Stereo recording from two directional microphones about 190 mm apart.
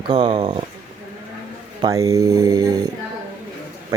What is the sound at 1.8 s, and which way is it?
Speech, 15° right (ahead or behind).